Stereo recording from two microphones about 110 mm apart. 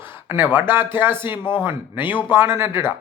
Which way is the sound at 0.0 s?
20° right (ahead or behind).